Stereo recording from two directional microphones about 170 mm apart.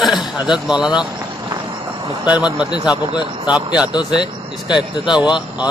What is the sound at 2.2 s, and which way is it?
Speech, 5° right (ahead or behind).